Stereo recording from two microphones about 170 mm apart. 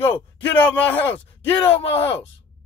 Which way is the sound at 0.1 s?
10° left (ahead or behind).